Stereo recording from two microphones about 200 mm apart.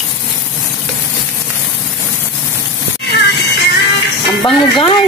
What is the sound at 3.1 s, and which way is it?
Music, 55° left (ahead or behind).